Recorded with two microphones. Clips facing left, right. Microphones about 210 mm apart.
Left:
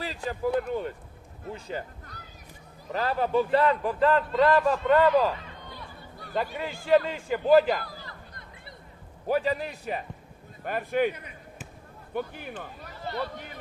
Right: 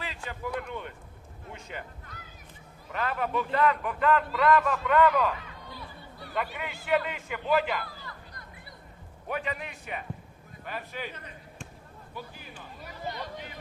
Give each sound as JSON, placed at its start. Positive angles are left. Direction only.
{"t": 0.0, "sound": "a man's voice", "side_deg": 35}
{"t": 9.2, "sound": "a man's voice", "side_deg": 35}
{"t": 10.6, "sound": "speech", "side_deg": 50}
{"t": 11.1, "sound": "basketball bounce", "side_deg": 10}
{"t": 12.1, "sound": "speech", "side_deg": 60}
{"t": 12.8, "sound": "speech", "side_deg": -15}